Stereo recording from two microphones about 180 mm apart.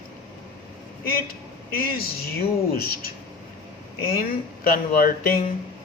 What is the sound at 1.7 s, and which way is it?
Speech, 55° left (ahead or behind).